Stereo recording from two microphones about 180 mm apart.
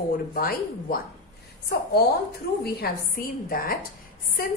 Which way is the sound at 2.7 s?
55° left (ahead or behind).